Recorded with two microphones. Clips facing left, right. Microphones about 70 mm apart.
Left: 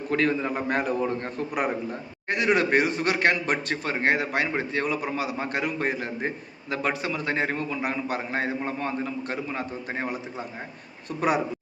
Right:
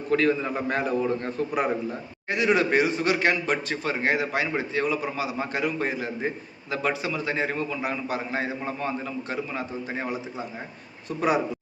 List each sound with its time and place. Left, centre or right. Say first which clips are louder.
0.1 s a man's voice: right 2 dB; left